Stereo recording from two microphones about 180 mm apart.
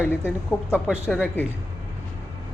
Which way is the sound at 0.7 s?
5° right (ahead or behind).